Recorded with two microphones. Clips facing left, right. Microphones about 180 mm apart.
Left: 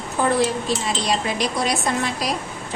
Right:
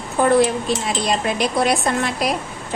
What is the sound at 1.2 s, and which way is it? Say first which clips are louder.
A woman's voice: right 4 dB; 55° right (ahead or behind).